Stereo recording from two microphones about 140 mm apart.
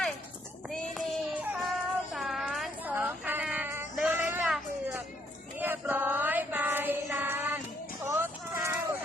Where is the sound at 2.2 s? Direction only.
Centre (ahead or behind).